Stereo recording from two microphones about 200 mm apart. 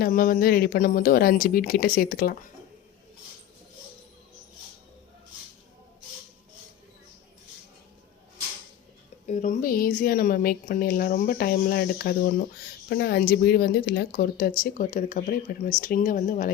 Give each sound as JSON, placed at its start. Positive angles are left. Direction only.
{"t": 0.0, "sound": "a woman's voice", "side_deg": 45}
{"t": 9.2, "sound": "a woman's voice", "side_deg": 35}